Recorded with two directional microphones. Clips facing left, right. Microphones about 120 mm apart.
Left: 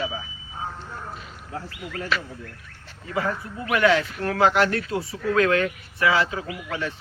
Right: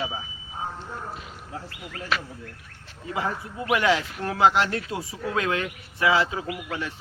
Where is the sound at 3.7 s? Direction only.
20° right (ahead or behind).